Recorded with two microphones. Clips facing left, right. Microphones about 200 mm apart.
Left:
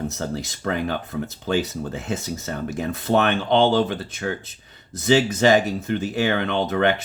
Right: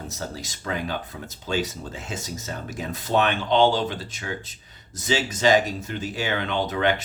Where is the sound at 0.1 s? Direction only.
60° left (ahead or behind).